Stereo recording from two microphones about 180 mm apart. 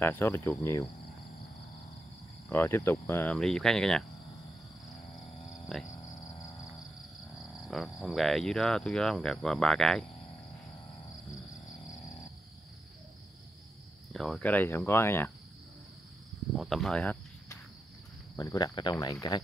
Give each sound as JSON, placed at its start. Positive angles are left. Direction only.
{"t": 0.0, "sound": "speech", "side_deg": 10}
{"t": 2.5, "sound": "speech", "side_deg": 10}
{"t": 5.7, "sound": "speech", "side_deg": 0}
{"t": 6.2, "sound": "vehicle", "side_deg": 20}
{"t": 7.3, "sound": "cricket", "side_deg": 0}
{"t": 8.0, "sound": "speech", "side_deg": 0}
{"t": 11.6, "sound": "a sound", "side_deg": 20}
{"t": 14.1, "sound": "speech", "side_deg": 0}
{"t": 16.5, "sound": "cricket", "side_deg": 0}
{"t": 18.3, "sound": "speech", "side_deg": 20}